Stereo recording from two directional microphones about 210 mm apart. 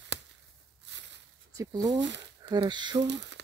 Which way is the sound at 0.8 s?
55° right (ahead or behind).